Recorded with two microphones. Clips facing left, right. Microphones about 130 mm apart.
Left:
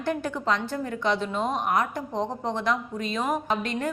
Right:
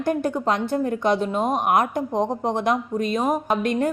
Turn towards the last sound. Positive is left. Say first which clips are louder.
# right 6 dB
turn(degrees=-50)  # may be behind; listen again after turning